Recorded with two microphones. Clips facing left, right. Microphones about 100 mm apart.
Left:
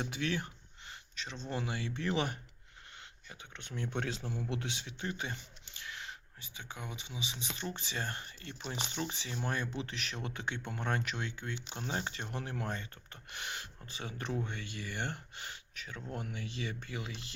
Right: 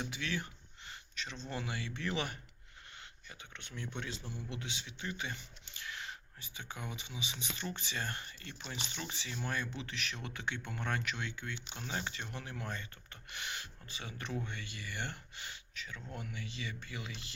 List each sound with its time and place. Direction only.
0.0 s speech: 45° left (ahead or behind)
0.9 s speech: 25° left (ahead or behind)
3.6 s speech: 40° left (ahead or behind)
3.9 s a man's voice: 85° left
4.4 s speech: 65° left (ahead or behind); by 5.4 s 40° left (ahead or behind)
5.7 s speech: 20° left (ahead or behind); by 17.1 s 45° left (ahead or behind)